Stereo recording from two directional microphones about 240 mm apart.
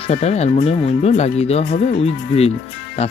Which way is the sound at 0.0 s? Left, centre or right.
Left.